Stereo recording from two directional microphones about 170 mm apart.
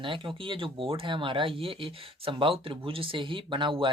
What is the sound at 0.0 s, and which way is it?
Speech, 30° right (ahead or behind).